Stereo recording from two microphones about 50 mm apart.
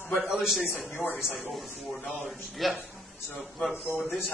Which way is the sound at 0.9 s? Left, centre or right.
Left.